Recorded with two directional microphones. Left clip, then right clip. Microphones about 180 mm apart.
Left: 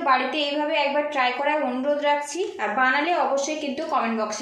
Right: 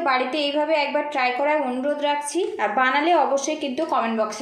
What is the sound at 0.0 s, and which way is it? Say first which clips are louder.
A woman's voice: even; 40° right (ahead or behind).